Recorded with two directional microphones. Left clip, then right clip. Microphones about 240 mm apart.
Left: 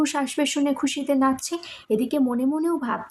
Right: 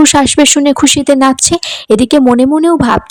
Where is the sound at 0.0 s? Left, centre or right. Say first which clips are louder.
Right 17 dB; right.